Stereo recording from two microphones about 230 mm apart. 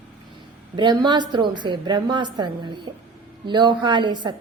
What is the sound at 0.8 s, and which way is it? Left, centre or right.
A woman's voice, centre.